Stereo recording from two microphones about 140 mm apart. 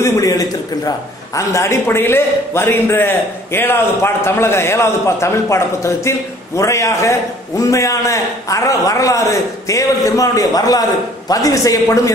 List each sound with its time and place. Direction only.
0.0 s a man's voice: 25° left (ahead or behind)